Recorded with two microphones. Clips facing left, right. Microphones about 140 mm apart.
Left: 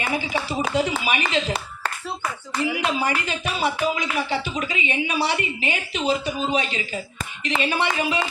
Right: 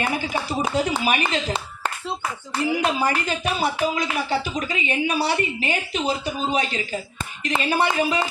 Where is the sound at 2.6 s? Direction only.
40° right (ahead or behind).